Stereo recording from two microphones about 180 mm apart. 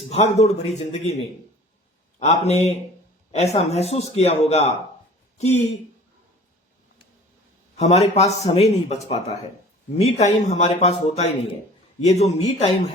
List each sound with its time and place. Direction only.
0.1 s speech: 35° left (ahead or behind)
7.8 s speech: 35° left (ahead or behind)